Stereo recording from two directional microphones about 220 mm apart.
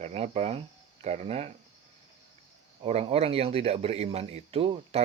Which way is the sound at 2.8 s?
30° right (ahead or behind).